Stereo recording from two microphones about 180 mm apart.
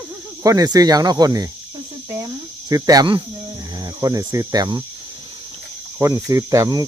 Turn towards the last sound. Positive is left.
turn(degrees=-20)  # may be behind; listen again after turning